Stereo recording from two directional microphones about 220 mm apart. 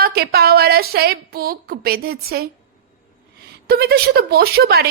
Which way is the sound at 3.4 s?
45° right (ahead or behind).